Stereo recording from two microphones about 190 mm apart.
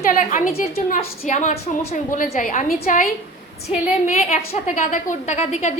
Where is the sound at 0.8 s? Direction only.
45° left (ahead or behind).